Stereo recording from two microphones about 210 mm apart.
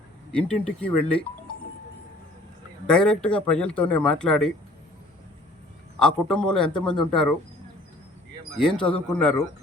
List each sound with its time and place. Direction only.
0.3 s speech: 5° left (ahead or behind)
2.8 s speech: 5° left (ahead or behind)
6.0 s speech: 5° left (ahead or behind)
8.5 s speech: 5° left (ahead or behind)